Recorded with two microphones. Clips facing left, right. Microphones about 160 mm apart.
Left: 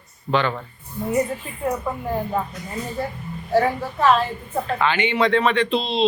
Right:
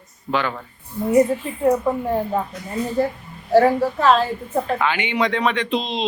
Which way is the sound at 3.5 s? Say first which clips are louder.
Right 5 dB; 30° right (ahead or behind).